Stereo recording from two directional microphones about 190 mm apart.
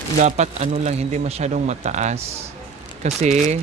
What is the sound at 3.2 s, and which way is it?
Speech, 35° right (ahead or behind).